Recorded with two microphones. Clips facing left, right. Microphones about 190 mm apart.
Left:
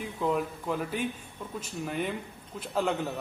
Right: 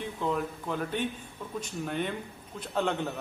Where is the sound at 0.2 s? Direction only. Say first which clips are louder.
Left 3 dB; 5° left (ahead or behind).